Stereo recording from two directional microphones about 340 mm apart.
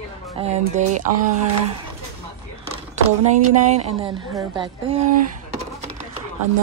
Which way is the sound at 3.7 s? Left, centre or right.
Centre.